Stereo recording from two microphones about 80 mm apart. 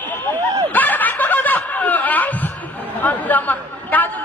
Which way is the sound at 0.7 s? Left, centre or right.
Left.